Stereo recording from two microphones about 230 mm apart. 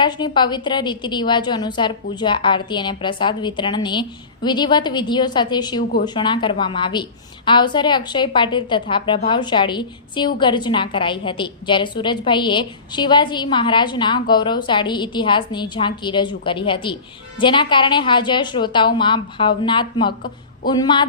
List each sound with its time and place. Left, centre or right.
0.0 s a woman's voice: centre